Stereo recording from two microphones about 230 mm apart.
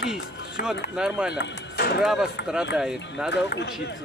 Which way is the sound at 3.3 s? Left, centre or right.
Left.